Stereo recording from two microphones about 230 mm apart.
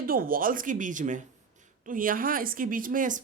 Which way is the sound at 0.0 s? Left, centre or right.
Right.